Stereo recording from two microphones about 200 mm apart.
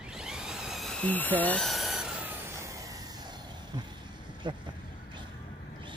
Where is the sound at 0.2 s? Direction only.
5° right (ahead or behind).